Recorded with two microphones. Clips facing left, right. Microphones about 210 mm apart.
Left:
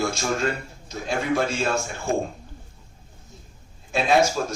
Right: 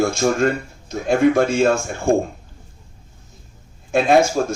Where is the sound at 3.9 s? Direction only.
50° right (ahead or behind).